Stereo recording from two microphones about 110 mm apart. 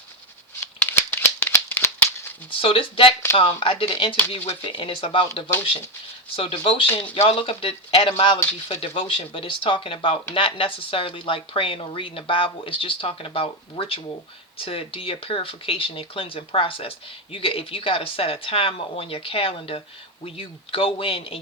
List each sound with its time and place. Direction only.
0.6 s shuffling cards: 20° left (ahead or behind)
2.6 s speech: 55° left (ahead or behind)
6.8 s speech: 15° left (ahead or behind)
7.2 s speech: 55° left (ahead or behind)